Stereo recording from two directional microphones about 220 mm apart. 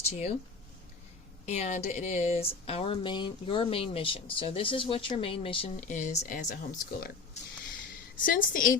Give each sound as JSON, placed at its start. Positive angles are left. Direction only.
{"t": 0.1, "sound": "a woman's voice", "side_deg": 30}
{"t": 1.5, "sound": "speech", "side_deg": 30}
{"t": 8.1, "sound": "a woman's voice", "side_deg": 40}